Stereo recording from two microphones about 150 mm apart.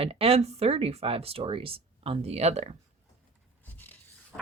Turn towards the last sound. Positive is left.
turn(degrees=10)  # may be behind; listen again after turning